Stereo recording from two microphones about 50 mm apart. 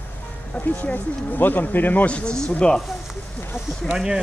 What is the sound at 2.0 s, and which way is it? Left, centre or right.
Speech, left.